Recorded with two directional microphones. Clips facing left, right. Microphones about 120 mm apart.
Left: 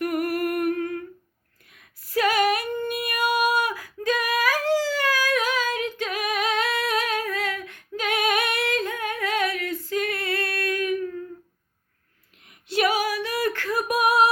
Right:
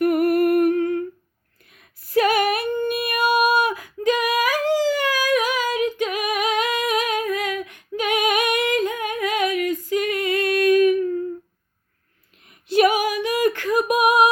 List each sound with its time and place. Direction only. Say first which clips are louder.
0.0 s humming: right 7 dB; 25° right (ahead or behind)
1.7 s female singing: right 6 dB; 25° right (ahead or behind)
12.7 s a sound: right 5 dB; 20° right (ahead or behind)